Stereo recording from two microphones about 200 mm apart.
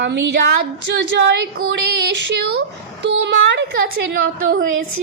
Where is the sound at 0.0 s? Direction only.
60° right (ahead or behind).